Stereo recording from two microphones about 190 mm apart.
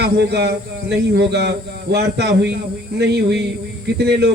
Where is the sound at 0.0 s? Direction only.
60° right (ahead or behind).